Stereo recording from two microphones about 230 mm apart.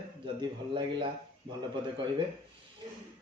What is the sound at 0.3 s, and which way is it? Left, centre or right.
Speech, right.